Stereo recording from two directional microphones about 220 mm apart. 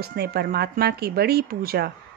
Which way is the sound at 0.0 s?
45° right (ahead or behind).